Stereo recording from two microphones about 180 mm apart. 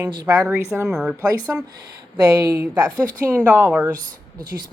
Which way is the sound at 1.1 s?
15° right (ahead or behind).